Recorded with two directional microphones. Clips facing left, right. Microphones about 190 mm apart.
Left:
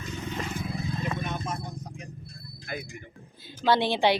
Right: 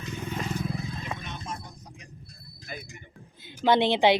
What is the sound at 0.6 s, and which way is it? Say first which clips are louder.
Vehicle: left 1 dB; 50° left (ahead or behind).